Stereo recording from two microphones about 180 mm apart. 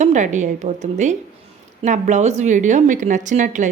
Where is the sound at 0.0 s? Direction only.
40° right (ahead or behind).